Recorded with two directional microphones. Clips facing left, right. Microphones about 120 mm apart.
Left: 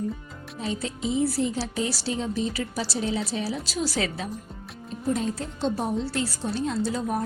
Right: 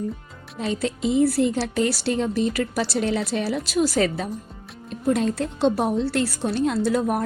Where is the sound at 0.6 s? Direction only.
70° right (ahead or behind); by 4.3 s 45° right (ahead or behind).